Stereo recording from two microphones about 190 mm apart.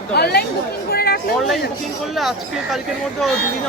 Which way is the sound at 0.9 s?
55° left (ahead or behind).